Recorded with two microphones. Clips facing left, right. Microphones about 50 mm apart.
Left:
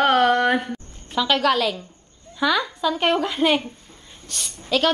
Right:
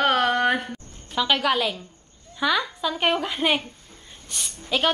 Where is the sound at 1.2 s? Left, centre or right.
Centre.